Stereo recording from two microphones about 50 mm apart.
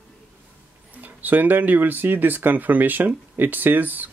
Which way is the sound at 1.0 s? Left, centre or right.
Right.